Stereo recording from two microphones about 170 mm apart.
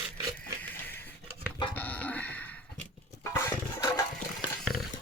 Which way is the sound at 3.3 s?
20° left (ahead or behind).